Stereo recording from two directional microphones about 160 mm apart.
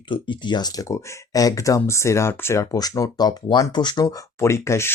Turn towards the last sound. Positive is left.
turn(degrees=15)  # may be behind; listen again after turning